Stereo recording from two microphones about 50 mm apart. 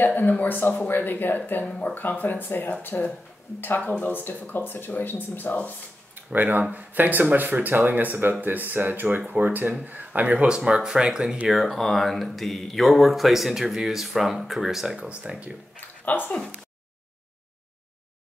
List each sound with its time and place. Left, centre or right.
0.0 s speech: left
6.1 s speech: right; by 11.3 s centre
11.4 s speech: centre
15.0 s speech: right
16.1 s speech: left